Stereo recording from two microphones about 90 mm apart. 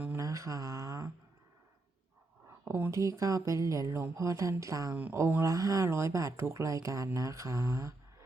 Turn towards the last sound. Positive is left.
turn(degrees=-35)  # may be behind; listen again after turning